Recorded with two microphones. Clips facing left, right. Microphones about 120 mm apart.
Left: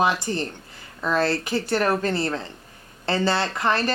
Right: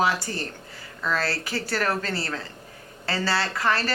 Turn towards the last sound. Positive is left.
turn(degrees=20)  # may be behind; listen again after turning